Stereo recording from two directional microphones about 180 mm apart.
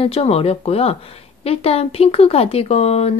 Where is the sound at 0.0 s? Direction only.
35° left (ahead or behind).